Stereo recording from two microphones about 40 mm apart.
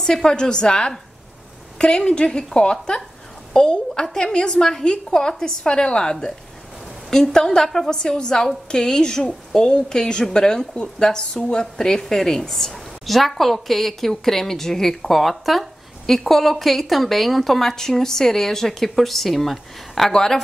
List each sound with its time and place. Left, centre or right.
0.0 s a woman's voice: centre
20.1 s a woman's voice: centre